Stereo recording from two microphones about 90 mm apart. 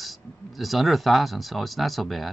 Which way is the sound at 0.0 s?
Centre (ahead or behind).